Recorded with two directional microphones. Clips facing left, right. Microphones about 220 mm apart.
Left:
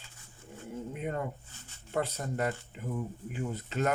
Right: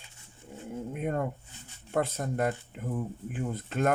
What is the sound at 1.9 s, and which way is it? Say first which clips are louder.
Speech: right 3 dB; 50° right (ahead or behind).